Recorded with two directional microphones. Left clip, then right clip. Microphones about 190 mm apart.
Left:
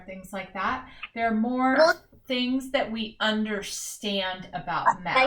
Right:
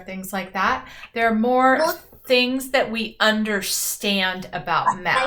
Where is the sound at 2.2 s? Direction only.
20° right (ahead or behind).